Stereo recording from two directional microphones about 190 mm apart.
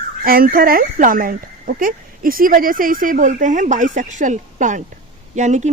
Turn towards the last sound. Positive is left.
turn(degrees=-40)  # may be behind; listen again after turning